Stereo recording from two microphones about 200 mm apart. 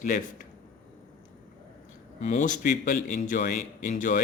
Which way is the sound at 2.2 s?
40° left (ahead or behind).